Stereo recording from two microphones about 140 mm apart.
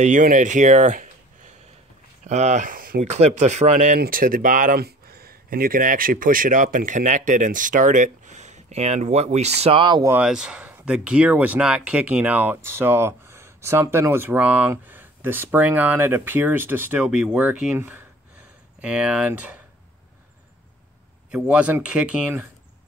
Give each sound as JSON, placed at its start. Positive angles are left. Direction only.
{"t": 0.0, "sound": "speech", "side_deg": -70}
{"t": 2.2, "sound": "speech", "side_deg": -55}
{"t": 2.7, "sound": "a sound", "side_deg": -90}
{"t": 3.0, "sound": "speech", "side_deg": -55}
{"t": 10.0, "sound": "speech", "side_deg": -10}
{"t": 21.3, "sound": "speech", "side_deg": -10}